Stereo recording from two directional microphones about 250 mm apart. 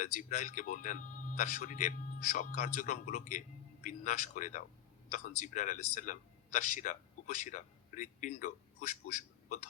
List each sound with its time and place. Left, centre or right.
0.0 s speech: left